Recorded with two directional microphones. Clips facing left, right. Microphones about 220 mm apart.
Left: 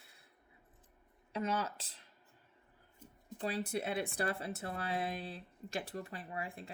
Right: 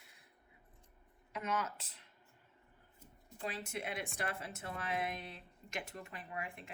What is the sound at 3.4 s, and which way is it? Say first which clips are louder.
Speech: left 5 dB; 35° left (ahead or behind).